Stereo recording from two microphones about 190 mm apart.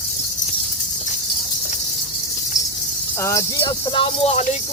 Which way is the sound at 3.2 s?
15° left (ahead or behind).